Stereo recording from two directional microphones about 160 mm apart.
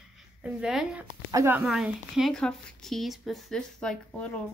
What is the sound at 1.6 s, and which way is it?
Speech, 5° right (ahead or behind).